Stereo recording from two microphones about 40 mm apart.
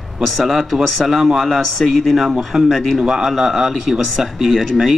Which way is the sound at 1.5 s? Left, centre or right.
Centre.